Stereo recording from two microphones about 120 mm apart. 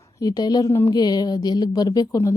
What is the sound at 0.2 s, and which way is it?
A woman's voice, 30° left (ahead or behind).